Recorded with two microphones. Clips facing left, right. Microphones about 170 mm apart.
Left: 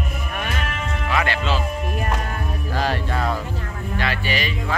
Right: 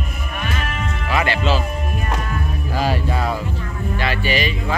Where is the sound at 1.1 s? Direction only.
5° right (ahead or behind).